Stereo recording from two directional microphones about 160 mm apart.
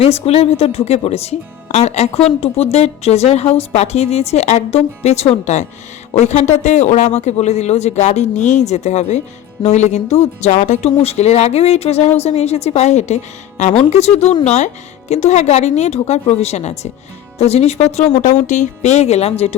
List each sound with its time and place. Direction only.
0.0 s speech: 40° left (ahead or behind)